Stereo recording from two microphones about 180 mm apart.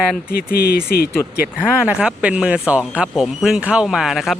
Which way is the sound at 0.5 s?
60° left (ahead or behind).